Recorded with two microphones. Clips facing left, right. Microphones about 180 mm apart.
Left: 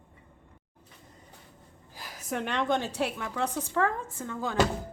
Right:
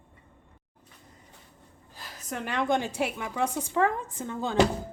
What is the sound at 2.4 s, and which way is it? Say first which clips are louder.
A woman's voice: right 2 dB; 10° right (ahead or behind).